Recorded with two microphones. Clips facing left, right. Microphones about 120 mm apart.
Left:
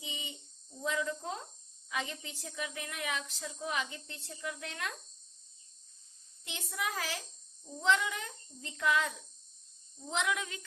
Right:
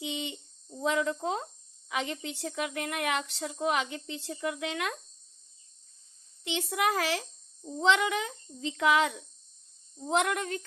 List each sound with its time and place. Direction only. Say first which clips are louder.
0.0 s a sound: right 10 dB; 70° right (ahead or behind)
0.8 s a woman's voice: right 6 dB; 75° right (ahead or behind)
6.4 s a woman's voice: right 10 dB; 80° right
10.1 s speech: right 7 dB; 55° right (ahead or behind)